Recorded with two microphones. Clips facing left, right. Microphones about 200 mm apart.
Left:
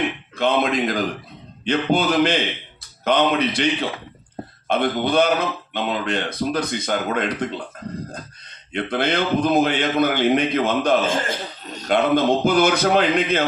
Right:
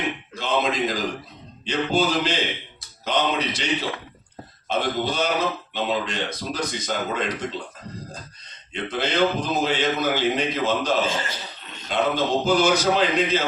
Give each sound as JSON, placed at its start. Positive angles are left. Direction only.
{"t": 0.3, "sound": "a man's voice", "side_deg": 60}
{"t": 11.9, "sound": "a man's voice", "side_deg": 60}